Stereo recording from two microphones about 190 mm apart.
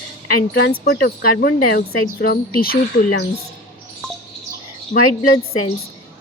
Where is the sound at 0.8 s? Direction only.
55° left (ahead or behind).